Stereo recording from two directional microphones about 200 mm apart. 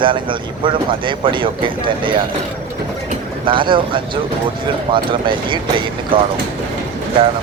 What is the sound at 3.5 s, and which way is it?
Speech, 25° right (ahead or behind).